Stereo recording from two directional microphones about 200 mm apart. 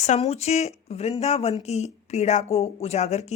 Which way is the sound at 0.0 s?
35° left (ahead or behind).